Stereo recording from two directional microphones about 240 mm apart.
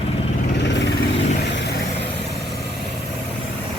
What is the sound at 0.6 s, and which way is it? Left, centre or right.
Vehicle, left.